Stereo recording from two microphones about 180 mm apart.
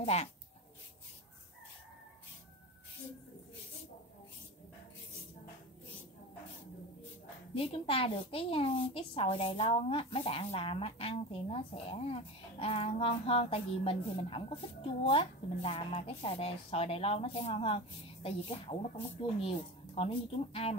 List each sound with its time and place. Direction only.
0.0 s a woman's voice: 35° left (ahead or behind)
7.5 s a woman's voice: 30° left (ahead or behind)